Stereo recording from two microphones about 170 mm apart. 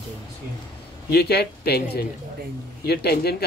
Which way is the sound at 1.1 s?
70° left (ahead or behind).